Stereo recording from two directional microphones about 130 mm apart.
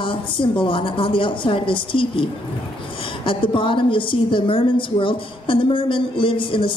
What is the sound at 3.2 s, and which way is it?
A woman's voice, 40° left (ahead or behind).